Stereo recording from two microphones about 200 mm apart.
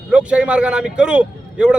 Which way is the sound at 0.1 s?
5° right (ahead or behind).